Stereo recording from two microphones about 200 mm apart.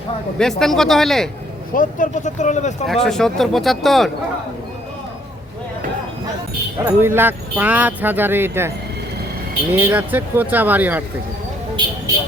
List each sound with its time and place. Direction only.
0.3 s speech: centre (ahead or behind)
1.7 s speech: 40° left (ahead or behind)
2.8 s speech: centre (ahead or behind)
6.7 s speech: 15° right (ahead or behind)
9.7 s speech: 10° right (ahead or behind)